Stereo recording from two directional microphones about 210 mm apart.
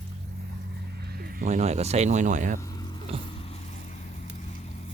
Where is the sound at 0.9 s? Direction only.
50° right (ahead or behind).